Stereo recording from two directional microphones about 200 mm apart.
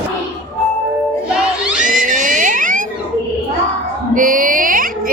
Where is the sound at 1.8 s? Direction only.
40° right (ahead or behind).